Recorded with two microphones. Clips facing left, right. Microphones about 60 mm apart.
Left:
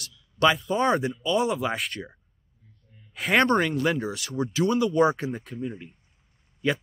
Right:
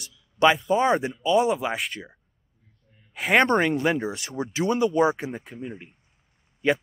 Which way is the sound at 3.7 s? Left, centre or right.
Right.